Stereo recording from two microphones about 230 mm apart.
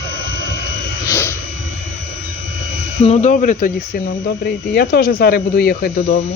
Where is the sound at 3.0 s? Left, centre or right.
Left.